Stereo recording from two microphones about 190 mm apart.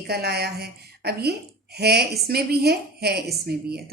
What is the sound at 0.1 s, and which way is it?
Speech, 55° right (ahead or behind).